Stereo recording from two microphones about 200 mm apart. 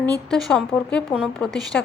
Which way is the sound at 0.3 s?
5° left (ahead or behind).